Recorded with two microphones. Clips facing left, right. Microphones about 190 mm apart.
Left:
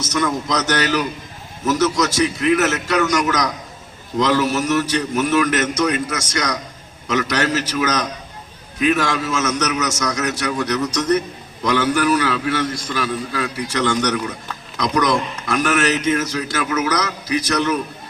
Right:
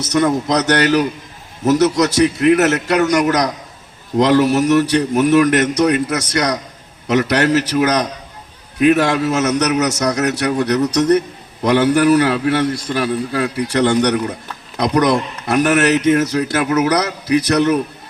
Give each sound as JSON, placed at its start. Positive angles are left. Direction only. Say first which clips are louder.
{"t": 0.0, "sound": "a man's voice", "louder": "right 5 dB", "side_deg": -60}
{"t": 16.6, "sound": "a man's voice", "louder": "right 4 dB", "side_deg": -35}
{"t": 16.9, "sound": "a man's voice", "louder": "right 5 dB", "side_deg": -65}